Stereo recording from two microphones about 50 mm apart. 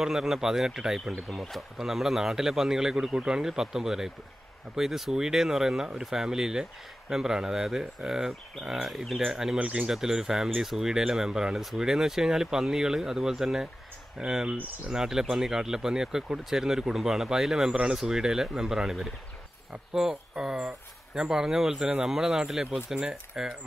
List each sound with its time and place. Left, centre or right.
0.0 s speech: centre
1.3 s speech: centre
1.8 s speech: centre
9.6 s speech: right
9.8 s speech: centre